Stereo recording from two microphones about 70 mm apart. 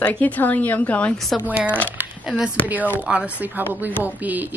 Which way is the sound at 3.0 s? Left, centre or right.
Centre.